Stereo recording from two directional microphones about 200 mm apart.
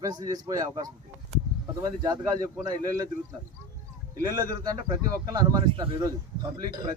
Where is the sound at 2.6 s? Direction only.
15° right (ahead or behind).